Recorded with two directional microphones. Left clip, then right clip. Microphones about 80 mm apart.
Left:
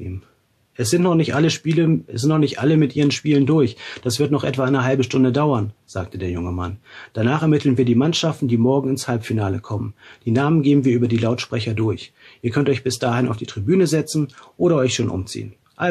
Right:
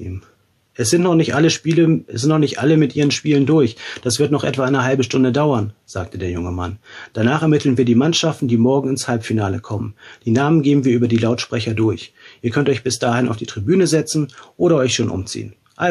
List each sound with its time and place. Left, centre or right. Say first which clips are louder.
0.7 s speech: right 3 dB; right